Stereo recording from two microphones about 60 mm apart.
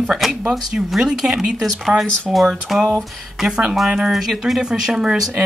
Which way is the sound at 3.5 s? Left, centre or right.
Centre.